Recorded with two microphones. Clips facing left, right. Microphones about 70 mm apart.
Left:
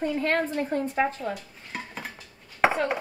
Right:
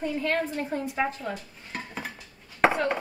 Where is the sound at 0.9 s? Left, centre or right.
Centre.